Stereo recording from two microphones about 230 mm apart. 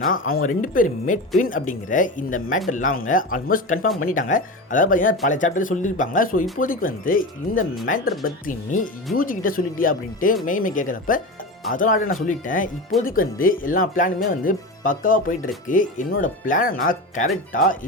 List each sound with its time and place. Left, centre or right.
0.0 s speech: left